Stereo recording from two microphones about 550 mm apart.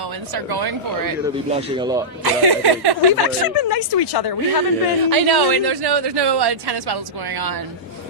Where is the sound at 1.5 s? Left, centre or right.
Centre.